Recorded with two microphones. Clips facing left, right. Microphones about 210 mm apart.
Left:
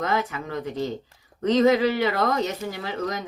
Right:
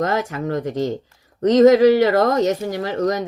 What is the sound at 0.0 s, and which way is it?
Speech, 45° right (ahead or behind).